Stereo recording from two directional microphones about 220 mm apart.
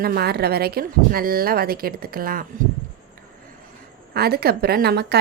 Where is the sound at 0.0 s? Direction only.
45° right (ahead or behind).